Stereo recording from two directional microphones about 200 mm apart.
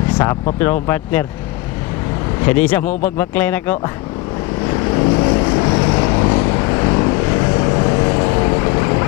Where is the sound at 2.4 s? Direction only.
10° left (ahead or behind).